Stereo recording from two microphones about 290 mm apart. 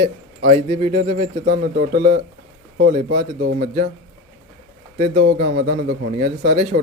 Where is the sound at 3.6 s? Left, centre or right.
Centre.